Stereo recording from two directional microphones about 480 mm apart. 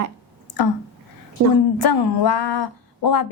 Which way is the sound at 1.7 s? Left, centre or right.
Left.